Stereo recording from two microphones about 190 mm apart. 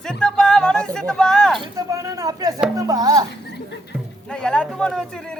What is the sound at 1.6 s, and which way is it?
Speech, 15° right (ahead or behind).